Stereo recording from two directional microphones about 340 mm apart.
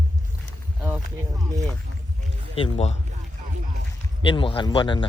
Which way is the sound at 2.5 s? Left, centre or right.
Centre.